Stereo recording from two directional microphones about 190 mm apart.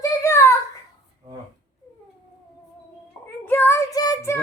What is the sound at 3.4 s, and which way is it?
Child singing, 10° left (ahead or behind).